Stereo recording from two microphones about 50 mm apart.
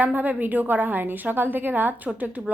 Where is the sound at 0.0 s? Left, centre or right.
Right.